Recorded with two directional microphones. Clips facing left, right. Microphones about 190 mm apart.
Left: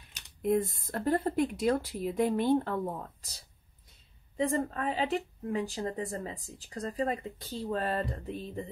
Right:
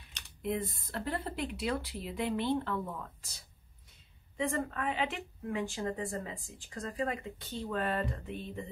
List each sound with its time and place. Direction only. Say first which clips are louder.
0.4 s speech: left 7 dB; 45° left (ahead or behind)